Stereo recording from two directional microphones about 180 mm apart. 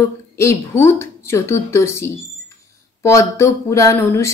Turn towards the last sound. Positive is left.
turn(degrees=15)  # may be behind; listen again after turning